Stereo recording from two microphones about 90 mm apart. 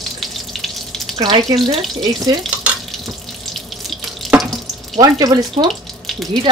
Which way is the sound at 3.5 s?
Centre (ahead or behind).